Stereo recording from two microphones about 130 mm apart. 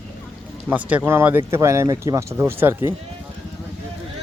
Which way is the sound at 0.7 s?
10° right (ahead or behind).